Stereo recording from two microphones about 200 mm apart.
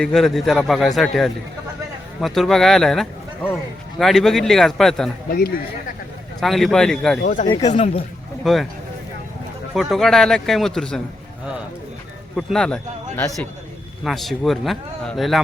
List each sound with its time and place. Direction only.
0.0 s speech: centre (ahead or behind)
6.4 s speech: centre (ahead or behind)
7.6 s speech: 35° left (ahead or behind)
8.4 s speech: centre (ahead or behind)
9.7 s speech: centre (ahead or behind)
12.4 s speech: centre (ahead or behind)